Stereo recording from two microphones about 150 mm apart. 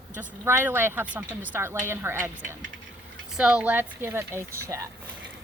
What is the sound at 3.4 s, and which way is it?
Speech, 5° right (ahead or behind).